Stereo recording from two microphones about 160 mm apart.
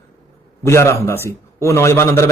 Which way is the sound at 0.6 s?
15° left (ahead or behind).